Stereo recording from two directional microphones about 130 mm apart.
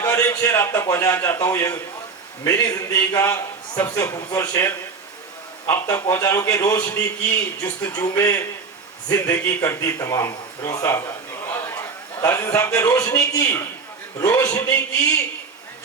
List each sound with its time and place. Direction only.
0.0 s a man's voice: 20° left (ahead or behind)
11.5 s a sound: 20° left (ahead or behind)
13.4 s a man's voice: 20° left (ahead or behind)